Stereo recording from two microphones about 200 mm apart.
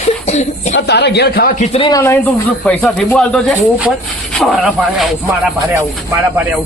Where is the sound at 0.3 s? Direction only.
35° left (ahead or behind).